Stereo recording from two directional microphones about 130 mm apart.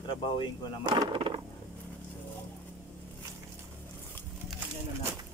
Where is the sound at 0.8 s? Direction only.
35° right (ahead or behind).